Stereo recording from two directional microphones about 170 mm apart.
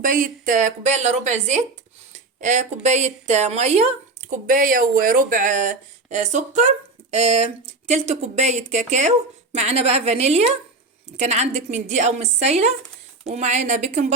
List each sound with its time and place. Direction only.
0.0 s a woman's voice: 50° right (ahead or behind)